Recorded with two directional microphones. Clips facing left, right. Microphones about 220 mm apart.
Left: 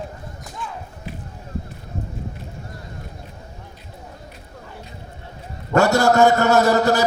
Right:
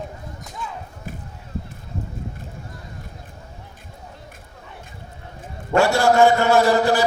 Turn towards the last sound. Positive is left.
turn(degrees=40)  # may be behind; listen again after turning